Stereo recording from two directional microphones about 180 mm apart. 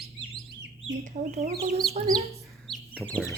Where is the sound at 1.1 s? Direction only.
40° right (ahead or behind).